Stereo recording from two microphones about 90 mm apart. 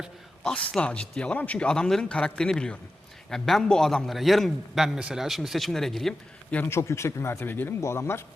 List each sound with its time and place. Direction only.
0.4 s a man's voice: 10° left (ahead or behind)
6.7 s speech: 30° left (ahead or behind)